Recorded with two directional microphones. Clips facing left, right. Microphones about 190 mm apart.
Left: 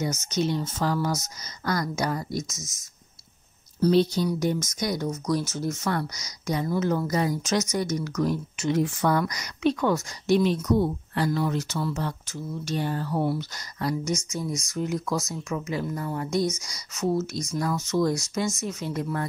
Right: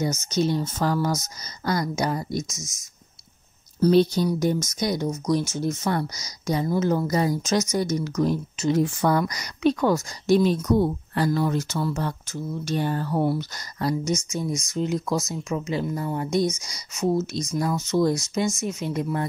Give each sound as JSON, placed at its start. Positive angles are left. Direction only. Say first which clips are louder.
{"t": 0.0, "sound": "speech", "louder": "right 3 dB", "side_deg": -35}
{"t": 1.7, "sound": "speech", "louder": "right 2 dB", "side_deg": -25}
{"t": 3.8, "sound": "speech", "louder": "right 3 dB", "side_deg": -50}
{"t": 4.6, "sound": "speech", "louder": "right 3 dB", "side_deg": -25}
{"t": 14.0, "sound": "speech", "louder": "right 3 dB", "side_deg": -20}